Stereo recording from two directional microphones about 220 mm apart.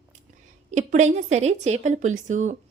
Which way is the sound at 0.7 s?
35° right (ahead or behind).